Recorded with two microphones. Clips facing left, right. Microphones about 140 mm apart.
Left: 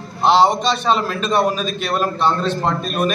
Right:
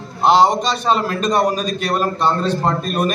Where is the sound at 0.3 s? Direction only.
40° right (ahead or behind).